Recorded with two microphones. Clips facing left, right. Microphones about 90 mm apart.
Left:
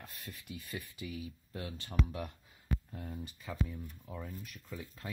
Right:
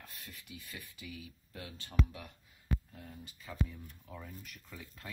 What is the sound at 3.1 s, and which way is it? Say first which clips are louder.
Speech: left 4 dB; 15° left (ahead or behind).